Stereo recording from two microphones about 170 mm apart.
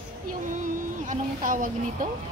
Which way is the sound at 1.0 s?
50° right (ahead or behind).